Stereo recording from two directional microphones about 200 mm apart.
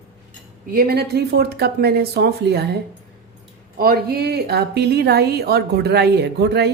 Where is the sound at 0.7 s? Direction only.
50° right (ahead or behind).